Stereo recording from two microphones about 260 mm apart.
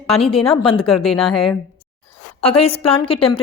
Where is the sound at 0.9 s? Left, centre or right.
Centre.